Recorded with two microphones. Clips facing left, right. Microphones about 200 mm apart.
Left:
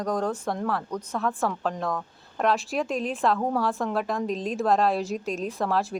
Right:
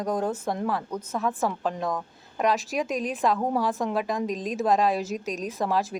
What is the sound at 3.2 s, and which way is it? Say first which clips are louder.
Speech: even; 15° right (ahead or behind).